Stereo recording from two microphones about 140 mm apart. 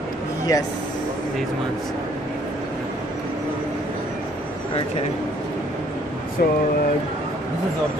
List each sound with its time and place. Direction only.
0.5 s speech: 25° left (ahead or behind)
6.4 s speech: 90° left